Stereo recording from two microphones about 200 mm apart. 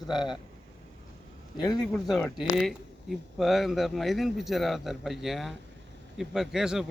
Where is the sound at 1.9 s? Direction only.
5° left (ahead or behind).